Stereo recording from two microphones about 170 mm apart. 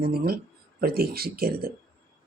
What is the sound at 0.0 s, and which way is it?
Speech, 65° right (ahead or behind).